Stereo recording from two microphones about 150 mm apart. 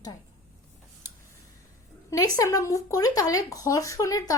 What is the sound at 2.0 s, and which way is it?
Speech, 20° left (ahead or behind).